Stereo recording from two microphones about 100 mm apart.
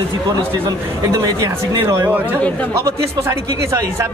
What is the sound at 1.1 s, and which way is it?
A man's voice, 35° right (ahead or behind).